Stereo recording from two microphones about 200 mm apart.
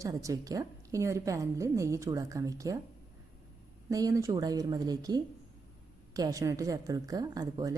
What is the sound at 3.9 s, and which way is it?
Speech, 15° right (ahead or behind).